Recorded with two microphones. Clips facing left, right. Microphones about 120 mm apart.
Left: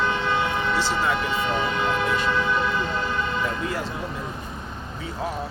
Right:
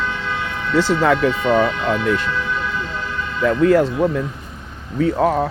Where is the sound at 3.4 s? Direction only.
90° right; by 5.4 s 65° right (ahead or behind).